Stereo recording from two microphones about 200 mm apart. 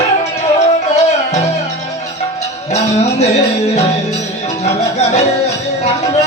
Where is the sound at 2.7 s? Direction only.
35° left (ahead or behind).